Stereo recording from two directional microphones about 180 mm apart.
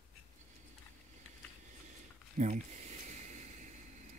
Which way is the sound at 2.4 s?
40° right (ahead or behind).